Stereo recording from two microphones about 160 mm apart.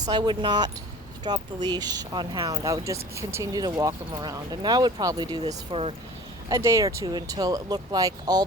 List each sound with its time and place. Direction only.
0.0 s speech: 25° right (ahead or behind)
6.5 s speech: 20° right (ahead or behind)